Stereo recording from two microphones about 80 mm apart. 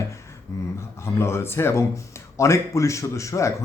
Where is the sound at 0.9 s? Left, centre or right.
Left.